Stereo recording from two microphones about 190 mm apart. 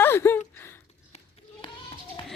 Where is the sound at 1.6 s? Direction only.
25° left (ahead or behind).